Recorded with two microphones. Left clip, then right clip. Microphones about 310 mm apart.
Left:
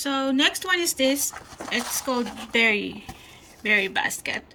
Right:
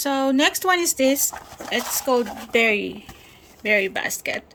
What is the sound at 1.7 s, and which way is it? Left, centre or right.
Speech, centre.